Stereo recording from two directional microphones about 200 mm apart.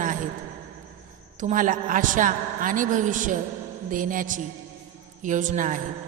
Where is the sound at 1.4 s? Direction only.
40° right (ahead or behind).